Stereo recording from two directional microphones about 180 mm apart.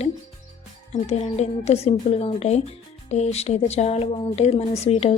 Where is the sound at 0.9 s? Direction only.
35° left (ahead or behind).